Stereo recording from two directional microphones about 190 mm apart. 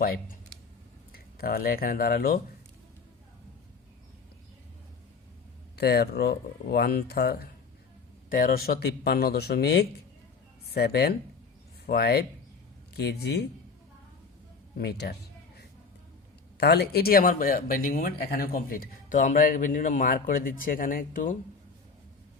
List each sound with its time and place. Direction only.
0.0 s speech: 50° left (ahead or behind)
5.7 s speech: 55° left (ahead or behind)
14.8 s speech: 55° left (ahead or behind)
16.6 s speech: 60° left (ahead or behind)